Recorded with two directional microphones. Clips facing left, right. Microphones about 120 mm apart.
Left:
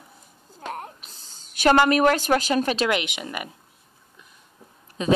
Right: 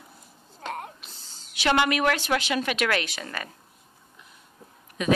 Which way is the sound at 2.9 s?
20° left (ahead or behind).